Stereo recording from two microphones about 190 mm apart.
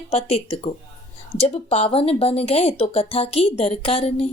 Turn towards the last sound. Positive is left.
turn(degrees=30)  # may be behind; listen again after turning